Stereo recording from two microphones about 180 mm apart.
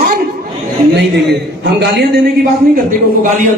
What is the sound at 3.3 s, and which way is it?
Speech, 45° right (ahead or behind).